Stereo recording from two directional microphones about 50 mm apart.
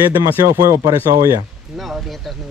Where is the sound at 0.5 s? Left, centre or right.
Right.